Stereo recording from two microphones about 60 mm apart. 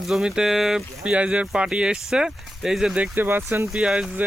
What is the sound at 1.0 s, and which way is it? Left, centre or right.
Speech, centre.